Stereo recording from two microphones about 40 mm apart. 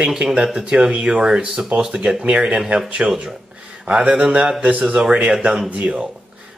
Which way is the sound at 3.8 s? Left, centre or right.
Right.